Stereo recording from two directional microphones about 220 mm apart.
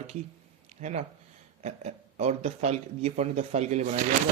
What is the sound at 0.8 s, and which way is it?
Speech, 30° right (ahead or behind).